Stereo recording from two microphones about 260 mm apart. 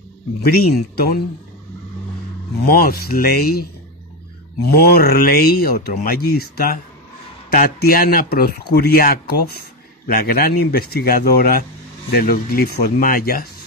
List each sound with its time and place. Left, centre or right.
0.4 s speech: left
2.6 s speech: left
4.7 s speech: left